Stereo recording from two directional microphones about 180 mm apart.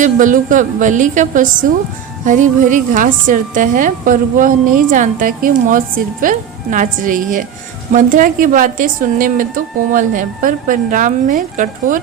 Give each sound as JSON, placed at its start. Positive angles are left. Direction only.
{"t": 0.0, "sound": "a woman's voice", "side_deg": -45}